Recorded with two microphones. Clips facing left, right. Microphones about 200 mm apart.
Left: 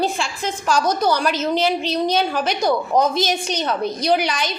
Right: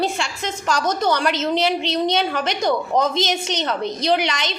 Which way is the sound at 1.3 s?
20° right (ahead or behind).